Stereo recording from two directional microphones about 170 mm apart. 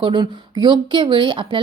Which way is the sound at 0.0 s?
25° right (ahead or behind).